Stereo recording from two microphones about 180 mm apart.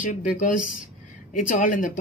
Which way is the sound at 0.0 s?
50° left (ahead or behind).